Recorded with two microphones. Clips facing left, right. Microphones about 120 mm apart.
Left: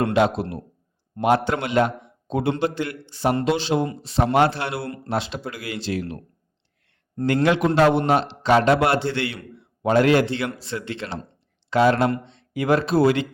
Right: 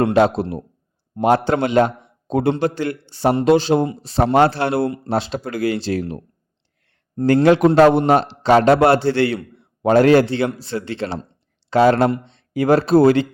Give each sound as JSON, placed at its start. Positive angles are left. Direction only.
{"t": 0.1, "sound": "a man's voice", "side_deg": -35}
{"t": 2.2, "sound": "a man's voice", "side_deg": -45}
{"t": 3.4, "sound": "a man's voice", "side_deg": -45}
{"t": 7.2, "sound": "a man's voice", "side_deg": -30}